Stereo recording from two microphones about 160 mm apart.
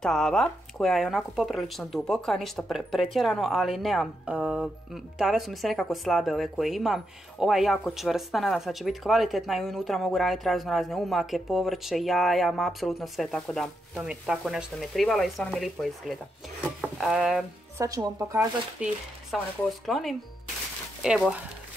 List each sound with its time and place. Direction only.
0.0 s speech: 5° left (ahead or behind)
17.7 s speech: 20° right (ahead or behind)
18.8 s speech: 5° right (ahead or behind)